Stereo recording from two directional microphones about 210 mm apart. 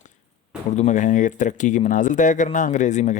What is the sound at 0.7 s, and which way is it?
Speech, 35° left (ahead or behind).